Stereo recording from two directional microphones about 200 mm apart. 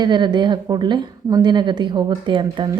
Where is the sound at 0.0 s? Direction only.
20° right (ahead or behind).